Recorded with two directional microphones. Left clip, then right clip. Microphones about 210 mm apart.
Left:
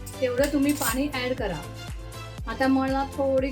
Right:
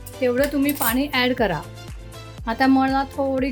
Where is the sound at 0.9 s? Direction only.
45° right (ahead or behind).